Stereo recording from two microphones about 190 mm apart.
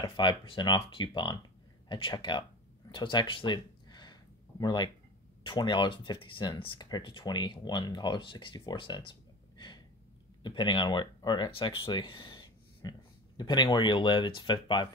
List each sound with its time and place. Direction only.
0.0 s speech: 25° left (ahead or behind)
2.9 s a sound: 25° left (ahead or behind)
5.4 s speech: 25° left (ahead or behind)
10.4 s speech: 25° left (ahead or behind)